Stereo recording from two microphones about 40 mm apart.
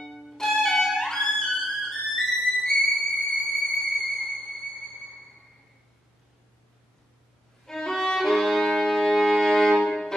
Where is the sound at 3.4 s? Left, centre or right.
Centre.